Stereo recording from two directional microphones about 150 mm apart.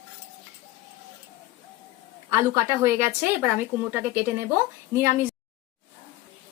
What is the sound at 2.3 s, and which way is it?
Speech, 20° right (ahead or behind).